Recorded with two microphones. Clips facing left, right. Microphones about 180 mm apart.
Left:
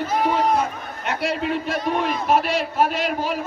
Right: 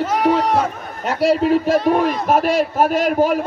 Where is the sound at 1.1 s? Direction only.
35° right (ahead or behind).